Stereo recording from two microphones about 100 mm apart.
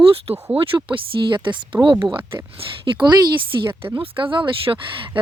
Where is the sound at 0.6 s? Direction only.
60° right (ahead or behind).